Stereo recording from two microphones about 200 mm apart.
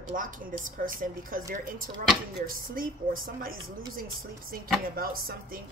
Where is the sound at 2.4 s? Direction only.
45° right (ahead or behind).